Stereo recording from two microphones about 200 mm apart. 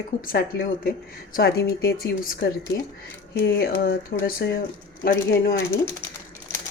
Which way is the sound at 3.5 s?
50° left (ahead or behind).